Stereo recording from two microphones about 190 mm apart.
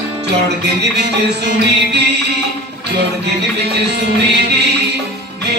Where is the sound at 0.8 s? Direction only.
60° right (ahead or behind).